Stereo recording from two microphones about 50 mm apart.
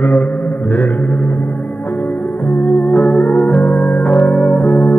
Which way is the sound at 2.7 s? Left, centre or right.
Left.